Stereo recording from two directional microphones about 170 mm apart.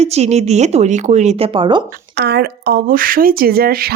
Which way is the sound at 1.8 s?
65° right (ahead or behind).